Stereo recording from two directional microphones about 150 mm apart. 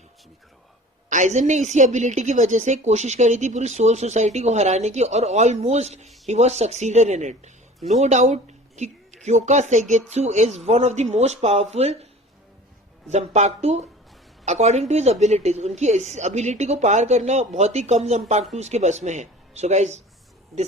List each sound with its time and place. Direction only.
1.1 s a woman's voice: 55° right (ahead or behind)
13.1 s a woman's voice: 50° right (ahead or behind)